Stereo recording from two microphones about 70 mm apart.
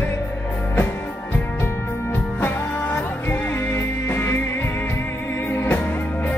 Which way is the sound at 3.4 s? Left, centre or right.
Left.